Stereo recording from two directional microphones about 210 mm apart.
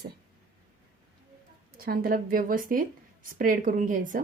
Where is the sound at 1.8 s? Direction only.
45° right (ahead or behind).